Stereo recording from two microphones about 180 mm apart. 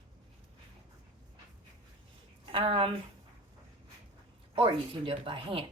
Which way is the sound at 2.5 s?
30° right (ahead or behind).